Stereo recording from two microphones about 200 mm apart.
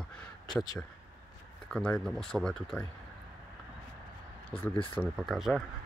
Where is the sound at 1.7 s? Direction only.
5° left (ahead or behind).